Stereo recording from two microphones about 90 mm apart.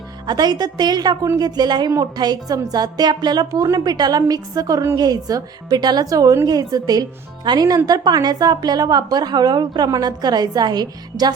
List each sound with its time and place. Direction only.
0.3 s a woman's voice: 50° right (ahead or behind)